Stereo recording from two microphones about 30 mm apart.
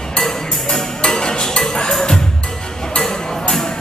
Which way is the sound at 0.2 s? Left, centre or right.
Centre.